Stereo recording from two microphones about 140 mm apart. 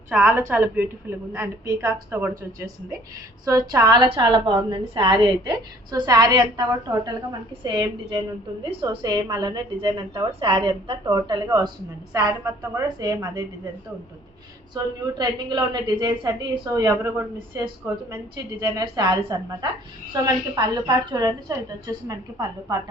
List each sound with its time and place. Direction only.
0.1 s a woman's voice: 10° right (ahead or behind)
3.4 s a woman's voice: 25° right (ahead or behind)
14.8 s a woman's voice: 30° right (ahead or behind)